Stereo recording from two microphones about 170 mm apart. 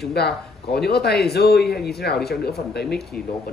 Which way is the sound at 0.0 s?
70° left (ahead or behind).